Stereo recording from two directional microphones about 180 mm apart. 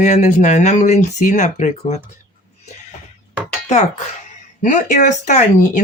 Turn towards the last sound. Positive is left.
turn(degrees=45)  # may be behind; listen again after turning